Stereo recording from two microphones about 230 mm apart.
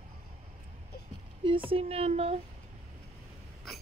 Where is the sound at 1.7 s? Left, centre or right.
Right.